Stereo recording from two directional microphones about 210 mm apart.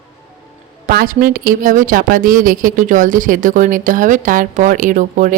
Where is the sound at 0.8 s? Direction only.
45° right (ahead or behind).